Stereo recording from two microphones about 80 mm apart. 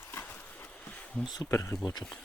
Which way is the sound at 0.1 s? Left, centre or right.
Left.